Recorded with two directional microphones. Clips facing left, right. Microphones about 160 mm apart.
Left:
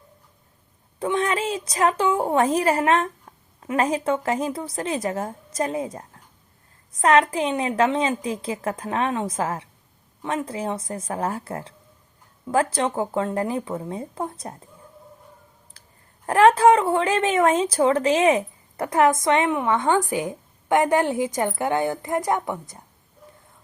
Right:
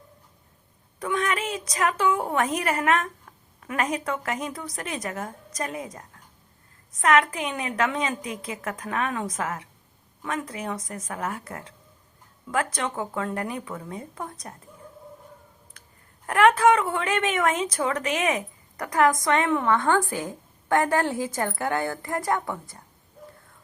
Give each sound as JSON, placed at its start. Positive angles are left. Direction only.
{"t": 0.9, "sound": "a woman's voice", "side_deg": 30}
{"t": 15.8, "sound": "clicking", "side_deg": 30}
{"t": 16.2, "sound": "a woman's voice", "side_deg": 30}